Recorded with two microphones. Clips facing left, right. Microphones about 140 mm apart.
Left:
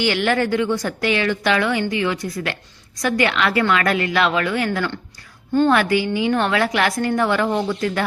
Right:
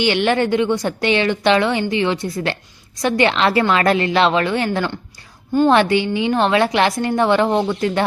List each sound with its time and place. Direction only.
0.0 s a woman's voice: 20° right (ahead or behind)